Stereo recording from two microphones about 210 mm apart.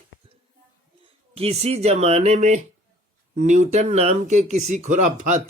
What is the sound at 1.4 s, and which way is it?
Speech, 30° right (ahead or behind).